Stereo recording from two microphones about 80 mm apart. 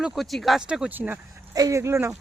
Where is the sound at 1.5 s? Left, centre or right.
Right.